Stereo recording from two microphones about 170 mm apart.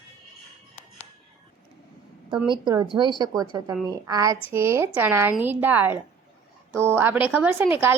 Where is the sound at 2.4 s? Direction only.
25° right (ahead or behind).